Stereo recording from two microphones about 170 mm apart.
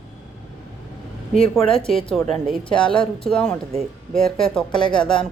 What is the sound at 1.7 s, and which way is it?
A woman's voice, centre (ahead or behind).